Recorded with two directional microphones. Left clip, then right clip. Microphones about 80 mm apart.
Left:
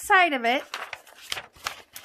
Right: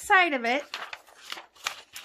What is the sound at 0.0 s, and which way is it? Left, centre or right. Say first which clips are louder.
Speech: left 2 dB; left.